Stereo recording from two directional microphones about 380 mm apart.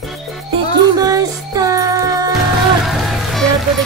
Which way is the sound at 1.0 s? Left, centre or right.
Centre.